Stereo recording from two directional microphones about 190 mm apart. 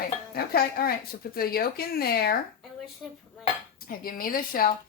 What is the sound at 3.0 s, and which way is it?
Speech, centre (ahead or behind).